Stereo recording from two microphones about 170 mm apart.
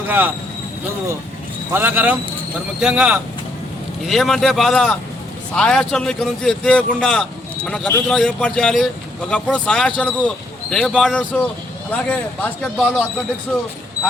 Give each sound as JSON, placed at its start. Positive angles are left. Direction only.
{"t": 1.7, "sound": "a man's voice", "side_deg": -10}